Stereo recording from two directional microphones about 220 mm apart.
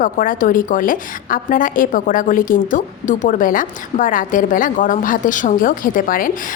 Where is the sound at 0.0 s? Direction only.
40° left (ahead or behind).